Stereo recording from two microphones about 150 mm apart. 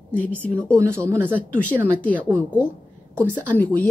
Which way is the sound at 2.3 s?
10° left (ahead or behind).